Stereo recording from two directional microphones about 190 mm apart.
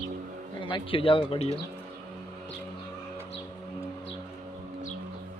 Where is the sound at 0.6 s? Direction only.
25° left (ahead or behind).